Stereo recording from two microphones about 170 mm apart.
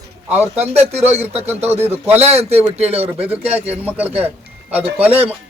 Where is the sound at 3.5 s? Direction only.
10° right (ahead or behind).